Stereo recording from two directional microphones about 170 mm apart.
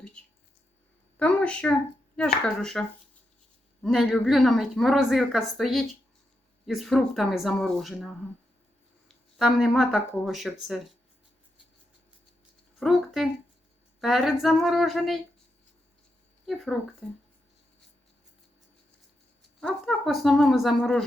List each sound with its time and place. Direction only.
1.2 s a woman's voice: 5° left (ahead or behind)
3.8 s a woman's voice: centre (ahead or behind)
9.0 s speech: centre (ahead or behind)
12.8 s a woman's voice: centre (ahead or behind)
17.0 s a woman's voice: centre (ahead or behind)
19.5 s a woman's voice: 5° left (ahead or behind)